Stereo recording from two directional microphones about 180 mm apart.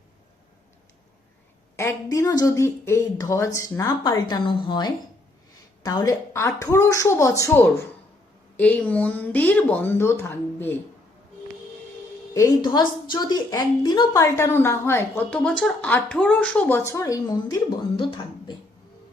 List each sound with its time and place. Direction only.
1.7 s a woman's voice: 15° left (ahead or behind)
12.6 s a woman's voice: 25° left (ahead or behind)